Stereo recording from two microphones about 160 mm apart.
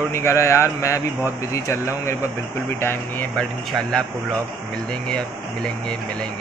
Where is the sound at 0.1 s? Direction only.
15° left (ahead or behind).